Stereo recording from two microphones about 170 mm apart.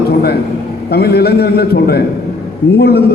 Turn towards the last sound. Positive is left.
turn(degrees=70)  # may be behind; listen again after turning